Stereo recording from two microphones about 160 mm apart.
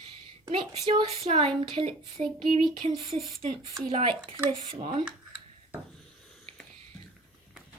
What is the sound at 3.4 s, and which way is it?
Speech, 45° right (ahead or behind).